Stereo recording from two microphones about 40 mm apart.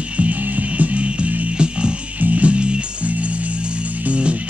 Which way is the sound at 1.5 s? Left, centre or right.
Right.